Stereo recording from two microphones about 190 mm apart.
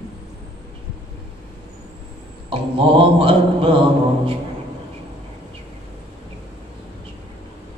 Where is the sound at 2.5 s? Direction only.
30° right (ahead or behind).